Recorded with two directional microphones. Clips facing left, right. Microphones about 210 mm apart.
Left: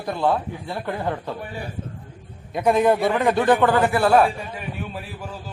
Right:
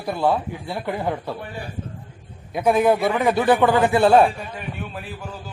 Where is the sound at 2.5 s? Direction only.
Centre (ahead or behind); by 4.3 s 25° right (ahead or behind).